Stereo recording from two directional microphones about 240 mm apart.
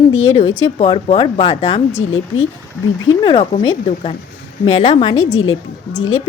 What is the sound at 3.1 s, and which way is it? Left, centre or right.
Speech, left.